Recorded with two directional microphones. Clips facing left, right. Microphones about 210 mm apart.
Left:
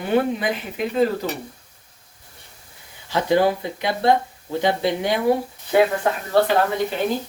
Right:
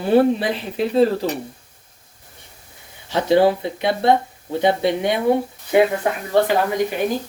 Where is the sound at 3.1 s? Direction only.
30° right (ahead or behind).